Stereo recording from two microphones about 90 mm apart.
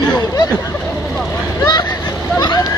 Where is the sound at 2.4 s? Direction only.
50° left (ahead or behind).